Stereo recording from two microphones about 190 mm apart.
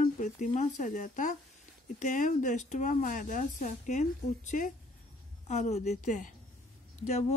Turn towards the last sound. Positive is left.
turn(degrees=35)  # may be behind; listen again after turning